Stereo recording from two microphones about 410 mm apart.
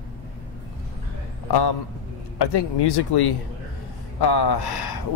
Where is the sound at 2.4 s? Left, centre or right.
Left.